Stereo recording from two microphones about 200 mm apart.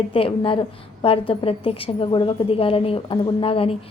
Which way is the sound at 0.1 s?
25° left (ahead or behind).